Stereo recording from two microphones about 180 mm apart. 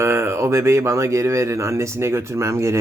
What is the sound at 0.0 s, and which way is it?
Speech, 15° right (ahead or behind).